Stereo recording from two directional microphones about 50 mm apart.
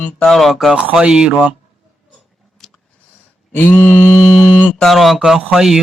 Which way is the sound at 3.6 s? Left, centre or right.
Left.